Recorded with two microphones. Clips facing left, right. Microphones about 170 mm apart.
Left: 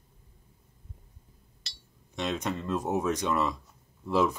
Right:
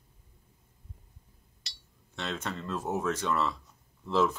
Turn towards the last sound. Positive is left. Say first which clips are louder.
# left 1 dB
turn(degrees=15)  # may be behind; listen again after turning